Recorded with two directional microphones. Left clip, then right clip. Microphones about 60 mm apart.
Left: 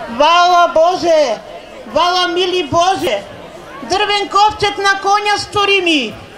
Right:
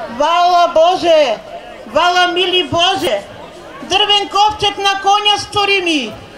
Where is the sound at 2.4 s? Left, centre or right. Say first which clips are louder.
Right 1 dB; centre.